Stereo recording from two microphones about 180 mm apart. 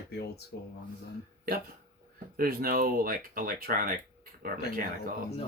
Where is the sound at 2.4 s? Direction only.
55° right (ahead or behind).